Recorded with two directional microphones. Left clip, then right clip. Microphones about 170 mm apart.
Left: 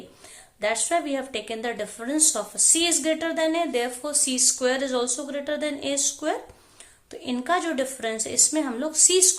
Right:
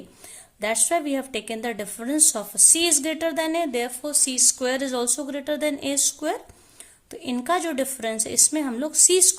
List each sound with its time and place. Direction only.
0.6 s a woman's voice: 50° right (ahead or behind)